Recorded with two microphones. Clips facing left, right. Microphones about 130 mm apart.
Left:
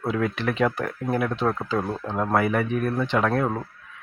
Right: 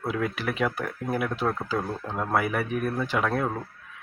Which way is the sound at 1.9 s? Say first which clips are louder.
Left 4 dB; 25° left (ahead or behind).